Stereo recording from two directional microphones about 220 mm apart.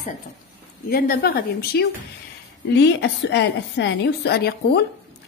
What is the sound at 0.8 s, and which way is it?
A woman's voice, 40° left (ahead or behind).